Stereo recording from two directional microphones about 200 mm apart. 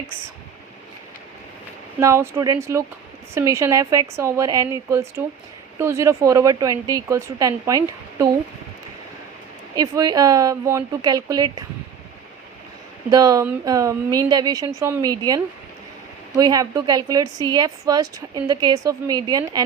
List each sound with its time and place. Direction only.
2.0 s speech: 15° right (ahead or behind)
9.7 s speech: 20° right (ahead or behind)
13.1 s a woman's voice: 15° right (ahead or behind)
16.4 s a woman's voice: 20° right (ahead or behind)